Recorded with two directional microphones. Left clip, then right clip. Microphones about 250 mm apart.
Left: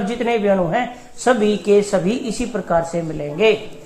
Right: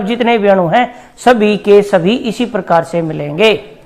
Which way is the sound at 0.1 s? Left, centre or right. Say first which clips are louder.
Right 8 dB; right.